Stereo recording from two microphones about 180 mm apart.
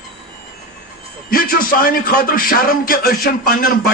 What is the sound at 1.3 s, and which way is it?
A man's voice, 55° left (ahead or behind).